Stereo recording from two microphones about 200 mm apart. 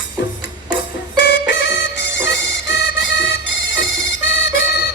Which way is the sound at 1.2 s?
65° left (ahead or behind).